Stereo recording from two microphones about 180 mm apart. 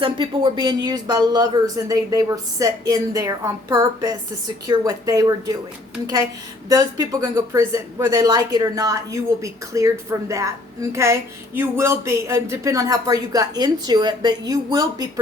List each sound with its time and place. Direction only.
0.0 s speech: 25° right (ahead or behind)
6.7 s speech: 20° right (ahead or behind)